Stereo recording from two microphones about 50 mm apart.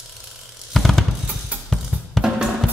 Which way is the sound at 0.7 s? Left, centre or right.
Centre.